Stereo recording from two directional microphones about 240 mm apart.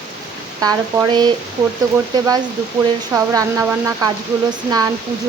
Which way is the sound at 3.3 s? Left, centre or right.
Centre.